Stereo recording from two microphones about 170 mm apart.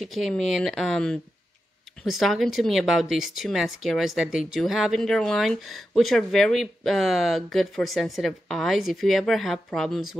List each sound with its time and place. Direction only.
0.0 s speech: centre (ahead or behind)